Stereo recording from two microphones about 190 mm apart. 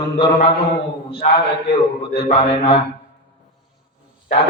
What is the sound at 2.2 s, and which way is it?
Speech, 30° left (ahead or behind).